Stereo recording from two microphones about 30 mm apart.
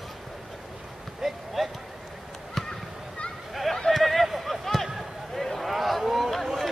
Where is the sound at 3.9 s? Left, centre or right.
Centre.